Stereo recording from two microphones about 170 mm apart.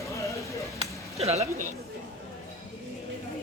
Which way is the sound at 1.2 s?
40° right (ahead or behind).